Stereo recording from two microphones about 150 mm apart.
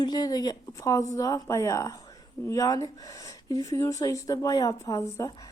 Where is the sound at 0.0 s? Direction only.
25° left (ahead or behind).